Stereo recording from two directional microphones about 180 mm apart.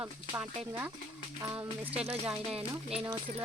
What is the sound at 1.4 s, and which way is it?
Speech, 15° right (ahead or behind).